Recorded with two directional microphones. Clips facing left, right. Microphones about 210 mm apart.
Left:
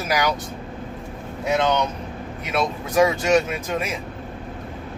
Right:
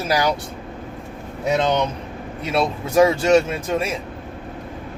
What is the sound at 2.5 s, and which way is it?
Speech, 30° right (ahead or behind).